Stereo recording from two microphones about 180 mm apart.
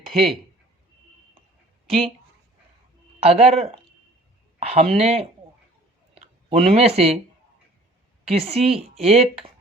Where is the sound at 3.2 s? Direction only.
35° right (ahead or behind).